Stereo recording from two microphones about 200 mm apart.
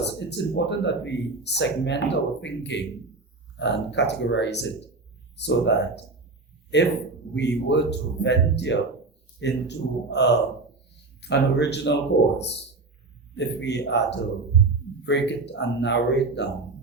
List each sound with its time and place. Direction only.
0.0 s speech: 60° left (ahead or behind)
6.7 s speech: 60° left (ahead or behind)
13.3 s speech: 60° left (ahead or behind)